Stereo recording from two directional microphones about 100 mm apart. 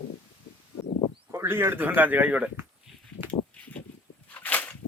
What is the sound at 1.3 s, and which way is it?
Speech, 25° right (ahead or behind).